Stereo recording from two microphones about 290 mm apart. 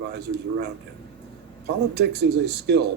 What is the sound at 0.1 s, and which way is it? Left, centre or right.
Speech, right.